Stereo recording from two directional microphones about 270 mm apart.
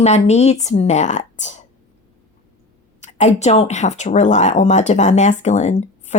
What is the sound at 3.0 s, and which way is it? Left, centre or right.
Speech, left.